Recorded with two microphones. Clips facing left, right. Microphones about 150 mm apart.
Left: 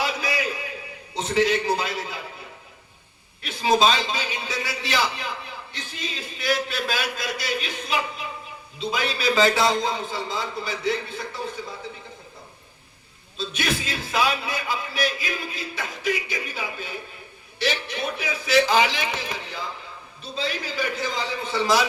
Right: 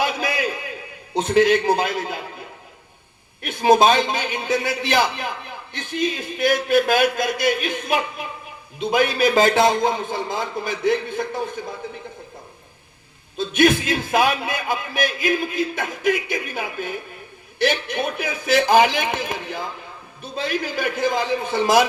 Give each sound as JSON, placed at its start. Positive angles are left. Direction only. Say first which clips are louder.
{"t": 0.0, "sound": "a sound", "louder": "right 4 dB", "side_deg": -55}
{"t": 1.1, "sound": "a man's voice", "louder": "right 6 dB", "side_deg": -55}
{"t": 3.4, "sound": "a man's voice", "louder": "right 5 dB", "side_deg": -55}
{"t": 13.3, "sound": "a man's voice", "louder": "right 10 dB", "side_deg": -55}